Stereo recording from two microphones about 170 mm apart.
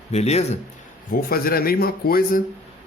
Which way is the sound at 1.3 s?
60° left (ahead or behind).